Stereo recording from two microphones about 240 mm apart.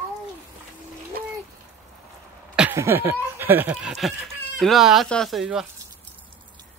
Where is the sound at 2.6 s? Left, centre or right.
Centre.